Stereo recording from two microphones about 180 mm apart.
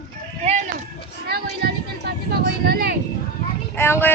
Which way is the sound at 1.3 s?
60° right (ahead or behind).